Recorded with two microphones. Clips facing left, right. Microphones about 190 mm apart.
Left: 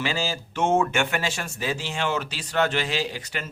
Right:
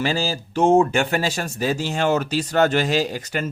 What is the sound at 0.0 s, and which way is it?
Speech, 40° right (ahead or behind).